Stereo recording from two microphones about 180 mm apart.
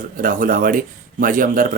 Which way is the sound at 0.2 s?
50° right (ahead or behind).